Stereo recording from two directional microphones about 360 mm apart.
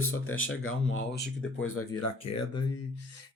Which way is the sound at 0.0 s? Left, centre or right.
Left.